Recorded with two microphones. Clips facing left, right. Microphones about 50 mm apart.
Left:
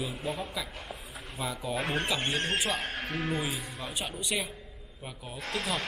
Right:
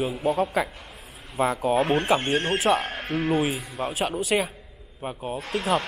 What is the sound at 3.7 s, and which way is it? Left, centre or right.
Speech, right.